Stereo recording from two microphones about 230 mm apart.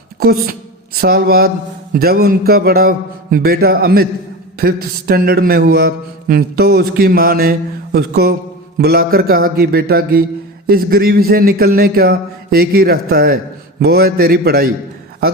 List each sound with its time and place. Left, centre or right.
0.2 s a woman's voice: right
7.9 s mantra: right
8.8 s a man's voice: right